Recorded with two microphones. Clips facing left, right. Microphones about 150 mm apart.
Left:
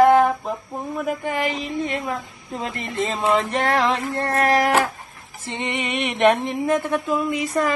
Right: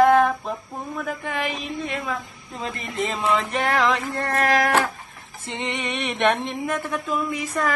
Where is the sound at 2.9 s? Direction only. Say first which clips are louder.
Left 3 dB; 30° left (ahead or behind).